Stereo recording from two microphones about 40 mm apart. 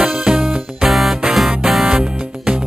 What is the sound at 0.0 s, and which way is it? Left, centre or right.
Music, centre.